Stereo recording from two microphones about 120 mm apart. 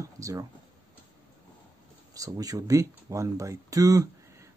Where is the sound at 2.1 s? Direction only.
30° right (ahead or behind).